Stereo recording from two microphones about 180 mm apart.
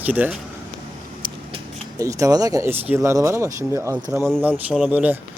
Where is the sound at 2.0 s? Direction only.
20° right (ahead or behind).